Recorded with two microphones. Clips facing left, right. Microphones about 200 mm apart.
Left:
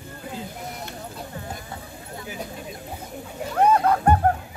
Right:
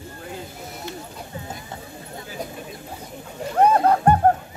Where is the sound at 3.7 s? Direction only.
35° right (ahead or behind).